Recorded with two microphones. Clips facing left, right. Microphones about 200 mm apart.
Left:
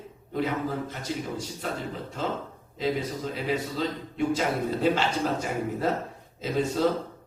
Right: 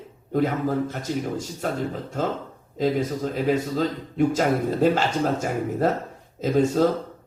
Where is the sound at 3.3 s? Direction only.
45° right (ahead or behind).